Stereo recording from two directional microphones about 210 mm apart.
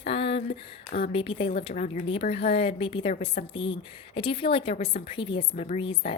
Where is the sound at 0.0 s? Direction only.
25° left (ahead or behind).